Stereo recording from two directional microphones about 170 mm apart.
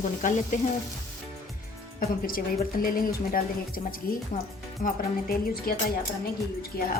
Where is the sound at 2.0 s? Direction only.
60° left (ahead or behind).